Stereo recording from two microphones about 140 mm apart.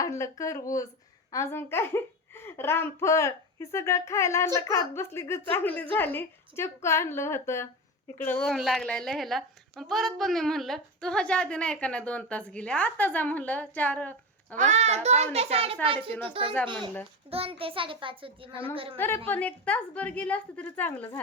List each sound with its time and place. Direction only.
0.0 s a woman's voice: 20° left (ahead or behind)
14.5 s a child's voice: 60° right (ahead or behind); by 18.9 s 40° right (ahead or behind)
18.9 s a woman's voice: 15° left (ahead or behind)